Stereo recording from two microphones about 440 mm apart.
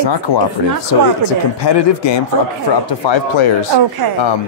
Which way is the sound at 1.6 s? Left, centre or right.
Left.